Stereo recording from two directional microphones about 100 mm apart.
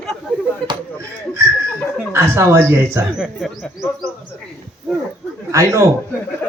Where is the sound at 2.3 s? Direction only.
25° right (ahead or behind).